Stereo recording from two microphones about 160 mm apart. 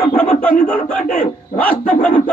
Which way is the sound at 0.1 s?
5° left (ahead or behind).